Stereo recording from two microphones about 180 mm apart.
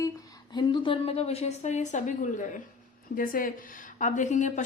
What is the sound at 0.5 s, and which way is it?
A woman's voice, 25° left (ahead or behind).